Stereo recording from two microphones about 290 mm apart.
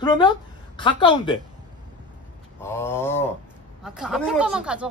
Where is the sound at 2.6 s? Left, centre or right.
Centre.